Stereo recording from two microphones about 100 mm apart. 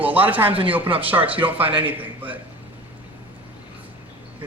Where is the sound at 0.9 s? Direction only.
65° right (ahead or behind).